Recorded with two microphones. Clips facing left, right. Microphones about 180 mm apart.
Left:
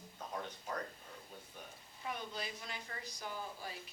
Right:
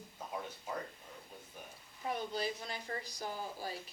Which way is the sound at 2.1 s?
35° right (ahead or behind).